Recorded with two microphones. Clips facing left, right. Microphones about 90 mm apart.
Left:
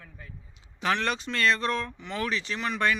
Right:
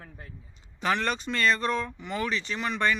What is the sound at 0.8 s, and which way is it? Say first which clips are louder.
Speech: even; centre (ahead or behind).